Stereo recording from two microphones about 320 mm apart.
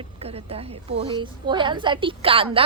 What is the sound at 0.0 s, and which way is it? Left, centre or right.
A woman's voice, centre.